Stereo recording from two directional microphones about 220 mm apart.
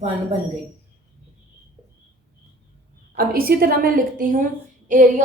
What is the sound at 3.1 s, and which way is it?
A woman's voice, 40° right (ahead or behind).